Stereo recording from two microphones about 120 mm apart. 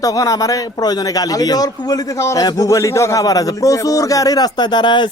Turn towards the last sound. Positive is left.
turn(degrees=40)  # may be behind; listen again after turning